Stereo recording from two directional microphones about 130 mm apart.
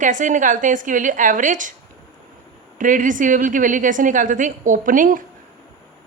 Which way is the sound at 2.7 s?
90° right.